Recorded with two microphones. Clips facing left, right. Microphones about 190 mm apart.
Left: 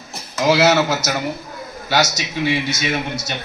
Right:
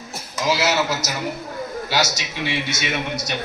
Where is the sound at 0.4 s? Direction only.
60° left (ahead or behind).